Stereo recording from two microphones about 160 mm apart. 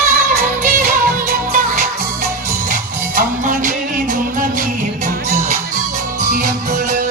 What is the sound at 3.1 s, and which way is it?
Music, 55° right (ahead or behind).